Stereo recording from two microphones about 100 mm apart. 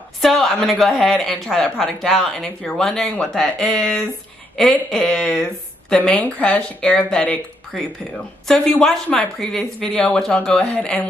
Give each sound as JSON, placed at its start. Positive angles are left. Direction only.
{"t": 0.2, "sound": "speech", "side_deg": 0}